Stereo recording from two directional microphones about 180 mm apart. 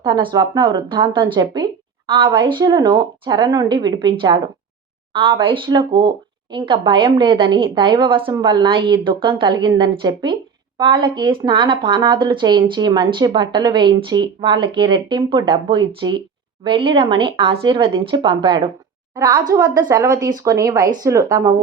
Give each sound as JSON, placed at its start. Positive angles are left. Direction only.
{"t": 0.0, "sound": "speech", "side_deg": -25}
{"t": 5.1, "sound": "speech", "side_deg": -30}